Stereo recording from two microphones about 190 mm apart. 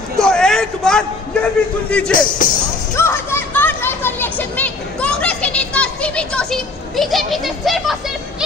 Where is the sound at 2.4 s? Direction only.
45° left (ahead or behind).